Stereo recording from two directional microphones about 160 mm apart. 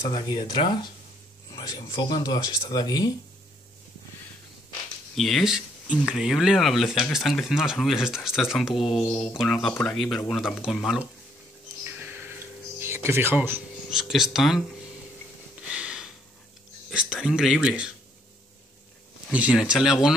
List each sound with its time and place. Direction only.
0.1 s speech: 30° left (ahead or behind)
1.5 s a sound: 25° left (ahead or behind)
1.9 s speech: 25° left (ahead or behind)
5.1 s speech: centre (ahead or behind)
11.8 s a sound: 15° right (ahead or behind)
12.8 s speech: 15° right (ahead or behind)
13.8 s speech: 5° right (ahead or behind)
15.7 s a sound: 5° right (ahead or behind)
17.2 s speech: 5° right (ahead or behind)
19.3 s speech: 5° right (ahead or behind)